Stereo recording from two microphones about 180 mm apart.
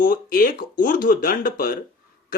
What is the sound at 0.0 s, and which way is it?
Speech, 50° left (ahead or behind).